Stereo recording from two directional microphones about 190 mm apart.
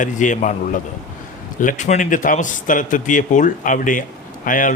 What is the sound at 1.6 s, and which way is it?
Speech, 40° left (ahead or behind).